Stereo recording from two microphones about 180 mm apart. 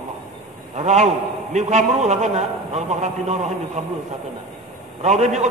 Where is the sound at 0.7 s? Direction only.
40° right (ahead or behind).